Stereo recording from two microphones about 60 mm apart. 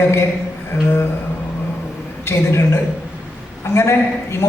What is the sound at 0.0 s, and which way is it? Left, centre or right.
Speech, left.